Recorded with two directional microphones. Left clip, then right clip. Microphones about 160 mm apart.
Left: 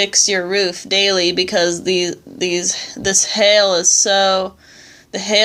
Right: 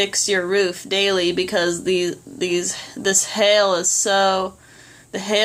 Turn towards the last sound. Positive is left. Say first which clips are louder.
# left 4 dB
turn(degrees=25)  # may be behind; listen again after turning